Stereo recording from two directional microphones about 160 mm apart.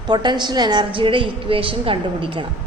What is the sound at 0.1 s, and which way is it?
A woman's voice, 25° right (ahead or behind).